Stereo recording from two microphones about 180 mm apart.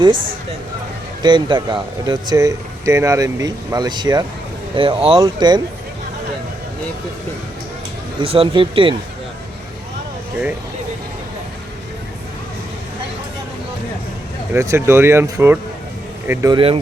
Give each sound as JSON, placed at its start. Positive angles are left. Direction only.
{"t": 1.2, "sound": "speech", "side_deg": -25}
{"t": 8.2, "sound": "speech", "side_deg": -30}
{"t": 14.5, "sound": "speech", "side_deg": -15}
{"t": 16.5, "sound": "speech", "side_deg": -30}